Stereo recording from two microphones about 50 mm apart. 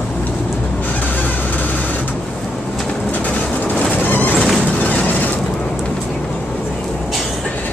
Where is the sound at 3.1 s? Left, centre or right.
Left.